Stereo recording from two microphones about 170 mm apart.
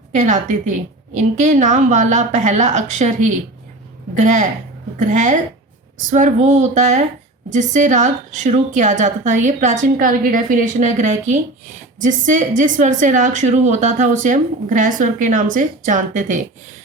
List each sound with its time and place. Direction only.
0.1 s a woman's voice: 45° right (ahead or behind)